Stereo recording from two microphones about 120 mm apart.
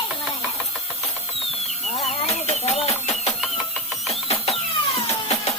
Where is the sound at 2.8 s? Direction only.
60° left (ahead or behind).